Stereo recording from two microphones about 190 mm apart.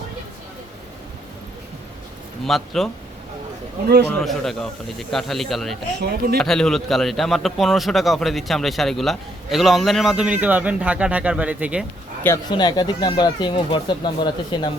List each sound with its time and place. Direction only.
2.4 s a man's voice: centre (ahead or behind)
4.2 s a man's voice: centre (ahead or behind)
6.0 s speech: 60° right (ahead or behind)
6.3 s a man's voice: 5° left (ahead or behind)
12.2 s speech: 20° left (ahead or behind)